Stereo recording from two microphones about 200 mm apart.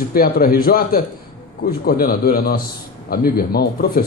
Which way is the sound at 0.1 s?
45° left (ahead or behind).